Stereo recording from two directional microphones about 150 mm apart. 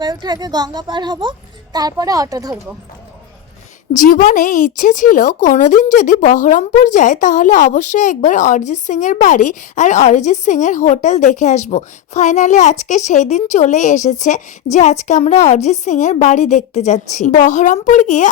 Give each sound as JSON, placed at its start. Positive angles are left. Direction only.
{"t": 0.0, "sound": "a child's voice", "side_deg": -30}
{"t": 3.9, "sound": "speech", "side_deg": 60}